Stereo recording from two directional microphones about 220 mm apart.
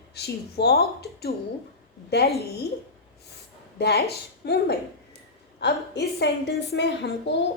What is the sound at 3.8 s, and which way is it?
A woman's voice, 45° left (ahead or behind).